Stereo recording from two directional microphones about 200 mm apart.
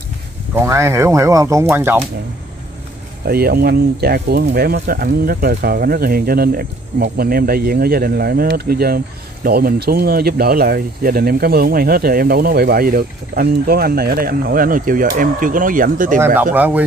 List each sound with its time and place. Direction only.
0.6 s speech: 15° right (ahead or behind)
3.3 s speech: 50° right (ahead or behind)
16.5 s speech: 10° right (ahead or behind)